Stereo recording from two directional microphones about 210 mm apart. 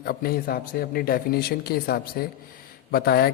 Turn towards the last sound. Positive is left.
turn(degrees=50)  # may be behind; listen again after turning